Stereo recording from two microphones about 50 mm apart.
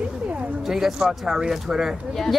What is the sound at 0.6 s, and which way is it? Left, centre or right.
Speech, centre.